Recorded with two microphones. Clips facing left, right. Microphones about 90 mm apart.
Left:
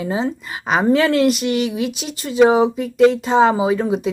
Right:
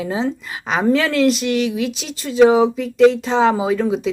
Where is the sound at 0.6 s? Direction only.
40° left (ahead or behind).